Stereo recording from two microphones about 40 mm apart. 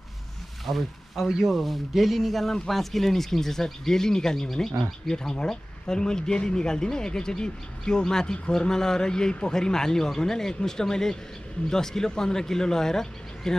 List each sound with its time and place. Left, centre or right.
1.1 s speech: centre